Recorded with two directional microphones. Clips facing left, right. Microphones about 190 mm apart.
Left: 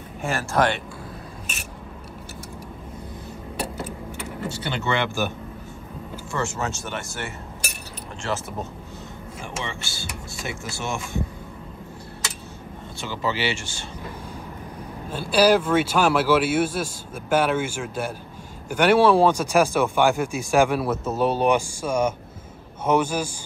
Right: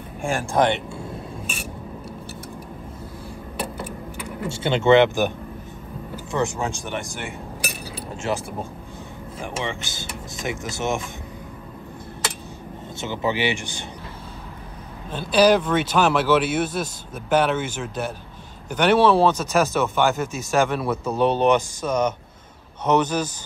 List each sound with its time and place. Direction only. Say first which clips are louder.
0.5 s speech: right 2 dB; 20° right (ahead or behind)
4.5 s speech: right 10 dB; 25° right (ahead or behind)
6.3 s speech: right 3 dB; 15° right (ahead or behind)
9.4 s speech: right 4 dB; 15° right (ahead or behind)
13.0 s speech: right 3 dB; 20° right (ahead or behind)
15.0 s speech: right 1 dB; 10° left (ahead or behind)